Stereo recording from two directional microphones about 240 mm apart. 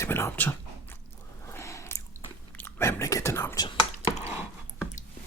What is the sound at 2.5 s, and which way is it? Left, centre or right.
Speech, centre.